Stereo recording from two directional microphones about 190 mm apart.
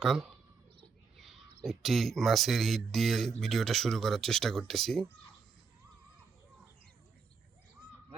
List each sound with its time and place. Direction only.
0.0 s speech: centre (ahead or behind)